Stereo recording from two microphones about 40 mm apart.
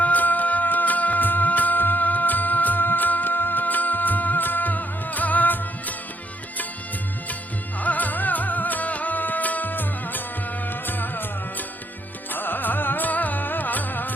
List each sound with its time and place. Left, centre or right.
0.0 s music: left
7.8 s music: left